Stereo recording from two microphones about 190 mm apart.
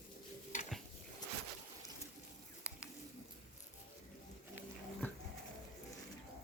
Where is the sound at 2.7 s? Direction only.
5° right (ahead or behind).